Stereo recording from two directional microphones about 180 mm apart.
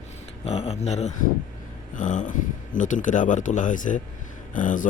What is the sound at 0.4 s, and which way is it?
Speech, 35° left (ahead or behind).